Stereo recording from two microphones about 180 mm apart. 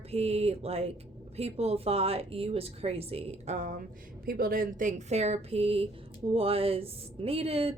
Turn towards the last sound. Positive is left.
turn(degrees=-30)  # may be behind; listen again after turning